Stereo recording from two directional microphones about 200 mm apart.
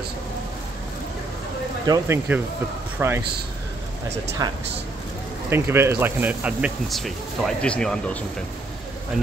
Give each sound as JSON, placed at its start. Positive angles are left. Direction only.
{"t": 1.9, "sound": "speech", "side_deg": -10}
{"t": 4.4, "sound": "speech", "side_deg": -20}